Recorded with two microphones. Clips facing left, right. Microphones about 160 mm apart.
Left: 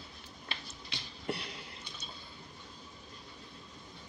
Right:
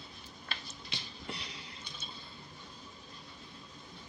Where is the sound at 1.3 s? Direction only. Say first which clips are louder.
Left 7 dB; 55° left (ahead or behind).